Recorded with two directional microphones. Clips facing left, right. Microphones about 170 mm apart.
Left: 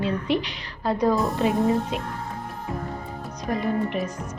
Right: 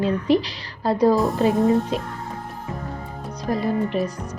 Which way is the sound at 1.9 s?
35° right (ahead or behind).